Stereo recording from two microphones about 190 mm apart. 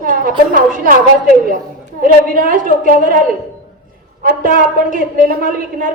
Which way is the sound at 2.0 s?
50° right (ahead or behind).